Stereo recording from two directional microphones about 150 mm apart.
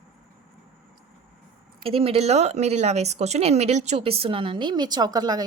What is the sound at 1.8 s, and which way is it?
Speech, 40° right (ahead or behind).